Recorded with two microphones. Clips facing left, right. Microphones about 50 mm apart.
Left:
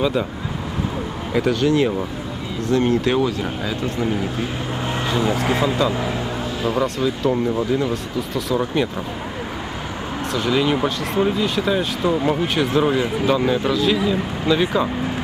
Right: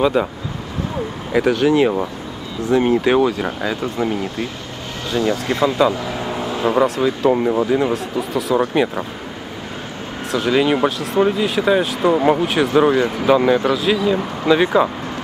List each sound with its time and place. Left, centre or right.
0.0 s speech: centre
1.4 s speech: centre
5.1 s speech: centre
5.4 s speech: centre
6.1 s speech: centre
7.9 s speech: centre
8.5 s speech: centre
10.5 s speech: centre
12.4 s speech: centre